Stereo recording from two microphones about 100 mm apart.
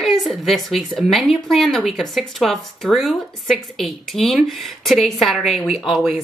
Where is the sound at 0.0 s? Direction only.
Centre (ahead or behind).